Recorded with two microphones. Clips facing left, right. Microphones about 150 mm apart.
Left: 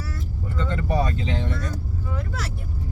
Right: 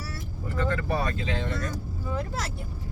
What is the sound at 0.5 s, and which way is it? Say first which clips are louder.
Vehicle: left 2 dB; 20° left (ahead or behind).